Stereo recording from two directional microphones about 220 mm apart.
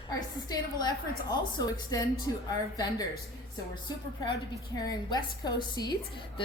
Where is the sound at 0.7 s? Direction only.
15° left (ahead or behind).